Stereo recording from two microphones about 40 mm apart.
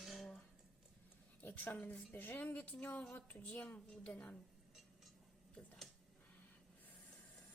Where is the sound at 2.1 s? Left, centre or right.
Left.